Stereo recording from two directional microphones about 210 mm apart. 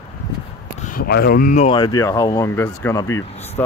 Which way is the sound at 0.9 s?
45° left (ahead or behind).